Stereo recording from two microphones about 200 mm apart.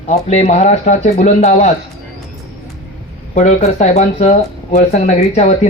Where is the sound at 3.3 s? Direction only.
35° left (ahead or behind).